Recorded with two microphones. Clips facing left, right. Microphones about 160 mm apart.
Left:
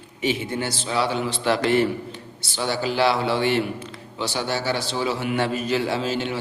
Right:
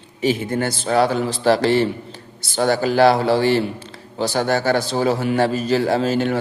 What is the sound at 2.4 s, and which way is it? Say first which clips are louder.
A man's voice: right 8 dB; 45° right (ahead or behind).